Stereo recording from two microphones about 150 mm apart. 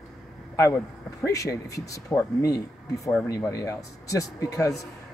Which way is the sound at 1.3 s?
20° left (ahead or behind).